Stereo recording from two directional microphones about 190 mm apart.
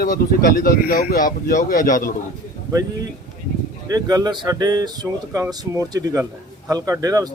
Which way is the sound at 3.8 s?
20° right (ahead or behind).